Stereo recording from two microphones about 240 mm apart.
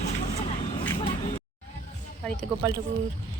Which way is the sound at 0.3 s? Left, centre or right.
Left.